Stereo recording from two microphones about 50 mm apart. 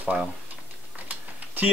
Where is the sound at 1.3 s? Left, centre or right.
Right.